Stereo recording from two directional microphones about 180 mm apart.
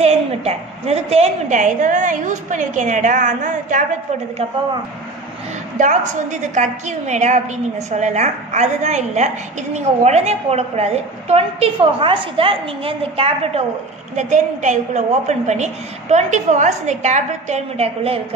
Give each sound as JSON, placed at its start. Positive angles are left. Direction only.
{"t": 0.0, "sound": "a woman's voice", "side_deg": -35}
{"t": 5.8, "sound": "a woman's voice", "side_deg": -45}